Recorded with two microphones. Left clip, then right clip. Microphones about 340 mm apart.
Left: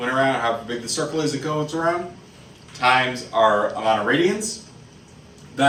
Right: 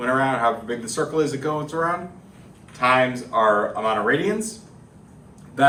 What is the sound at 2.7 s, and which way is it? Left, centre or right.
Speech, right.